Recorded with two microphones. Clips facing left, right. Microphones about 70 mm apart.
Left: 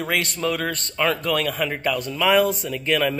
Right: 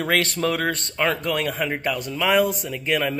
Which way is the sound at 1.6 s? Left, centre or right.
Centre.